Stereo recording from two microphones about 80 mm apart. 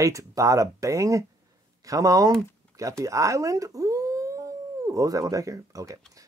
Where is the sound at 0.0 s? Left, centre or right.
Right.